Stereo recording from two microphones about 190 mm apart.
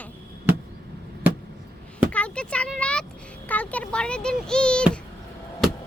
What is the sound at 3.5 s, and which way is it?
Speech, 10° left (ahead or behind).